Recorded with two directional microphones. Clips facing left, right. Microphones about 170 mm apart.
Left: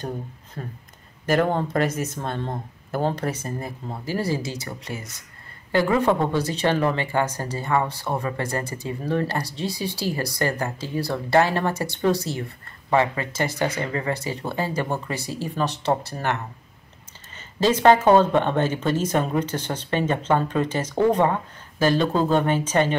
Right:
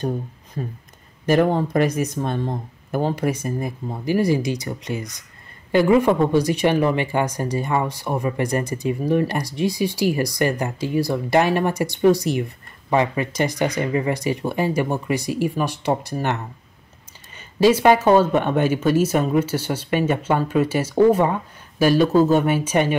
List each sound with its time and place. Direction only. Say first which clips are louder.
0.6 s speech: right 6 dB; 15° right (ahead or behind)
17.4 s speech: right 4 dB; 10° right (ahead or behind)